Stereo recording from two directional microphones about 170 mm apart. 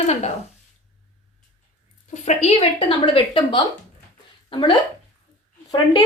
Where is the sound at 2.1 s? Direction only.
45° left (ahead or behind).